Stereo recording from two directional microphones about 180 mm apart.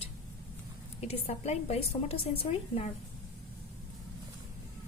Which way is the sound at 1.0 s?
35° left (ahead or behind).